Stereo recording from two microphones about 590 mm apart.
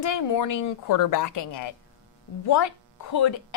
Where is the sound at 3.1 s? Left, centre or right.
Left.